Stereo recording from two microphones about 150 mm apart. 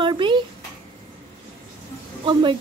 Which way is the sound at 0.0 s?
35° right (ahead or behind).